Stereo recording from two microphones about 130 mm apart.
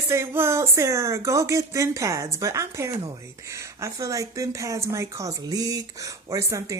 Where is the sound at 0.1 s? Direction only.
20° right (ahead or behind).